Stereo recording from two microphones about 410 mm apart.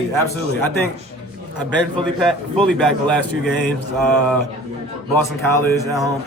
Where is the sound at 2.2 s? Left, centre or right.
Centre.